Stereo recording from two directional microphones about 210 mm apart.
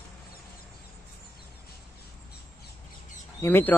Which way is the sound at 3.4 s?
10° left (ahead or behind).